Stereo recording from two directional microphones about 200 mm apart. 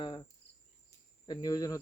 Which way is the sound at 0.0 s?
25° left (ahead or behind).